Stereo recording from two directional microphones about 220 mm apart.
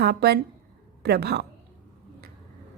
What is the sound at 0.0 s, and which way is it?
A woman's voice, 45° right (ahead or behind).